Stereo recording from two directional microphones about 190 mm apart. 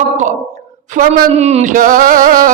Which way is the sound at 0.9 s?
35° right (ahead or behind).